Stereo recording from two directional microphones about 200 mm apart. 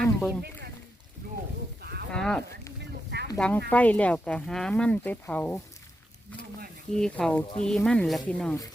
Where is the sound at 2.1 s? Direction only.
5° left (ahead or behind).